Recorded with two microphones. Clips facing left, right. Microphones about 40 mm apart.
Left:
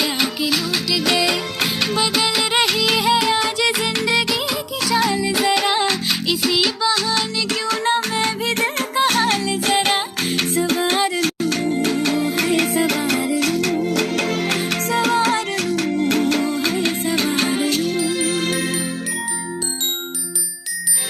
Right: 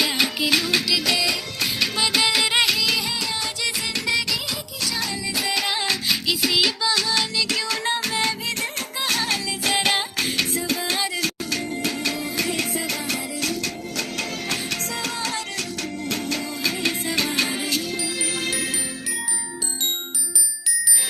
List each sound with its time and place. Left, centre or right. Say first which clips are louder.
0.4 s music: even; centre
1.0 s music: left 5 dB; left
1.9 s music: even; centre
2.9 s music: left 8 dB; left
3.8 s music: left 5 dB; left
4.5 s music: left 8 dB; left
5.4 s music: left 6 dB; left
8.5 s music: left 8 dB; left
8.9 s music: left 7 dB; left
9.7 s music: left 2 dB; centre
10.3 s music: left 9 dB; left
12.4 s music: left 7 dB; left
16.7 s music: left 4 dB; centre
17.6 s music: left 7 dB; left